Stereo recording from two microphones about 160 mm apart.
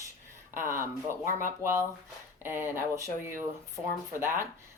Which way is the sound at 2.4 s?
15° right (ahead or behind).